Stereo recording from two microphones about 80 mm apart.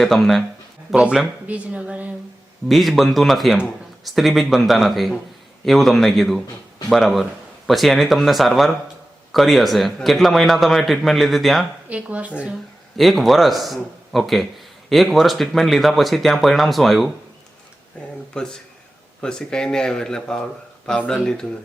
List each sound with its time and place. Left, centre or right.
0.0 s a man's voice: centre
2.6 s a man's voice: centre
11.9 s speech: centre
13.0 s a man's voice: centre
18.3 s speech: centre